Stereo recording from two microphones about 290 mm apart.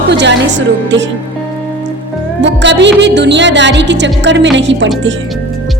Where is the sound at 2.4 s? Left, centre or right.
Right.